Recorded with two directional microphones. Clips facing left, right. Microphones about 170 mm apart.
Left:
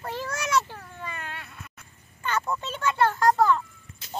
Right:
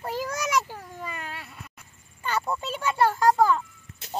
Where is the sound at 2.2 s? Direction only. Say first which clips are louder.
Even; 10° right (ahead or behind).